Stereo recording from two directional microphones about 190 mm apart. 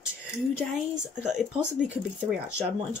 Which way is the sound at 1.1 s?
5° right (ahead or behind).